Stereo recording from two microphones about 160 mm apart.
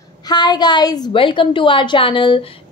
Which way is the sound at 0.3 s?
25° left (ahead or behind).